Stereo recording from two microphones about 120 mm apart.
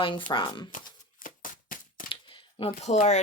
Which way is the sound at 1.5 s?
90° left.